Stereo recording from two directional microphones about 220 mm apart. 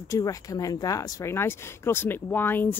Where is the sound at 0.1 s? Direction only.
15° left (ahead or behind).